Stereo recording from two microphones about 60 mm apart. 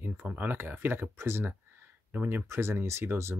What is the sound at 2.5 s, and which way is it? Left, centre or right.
Speech, right.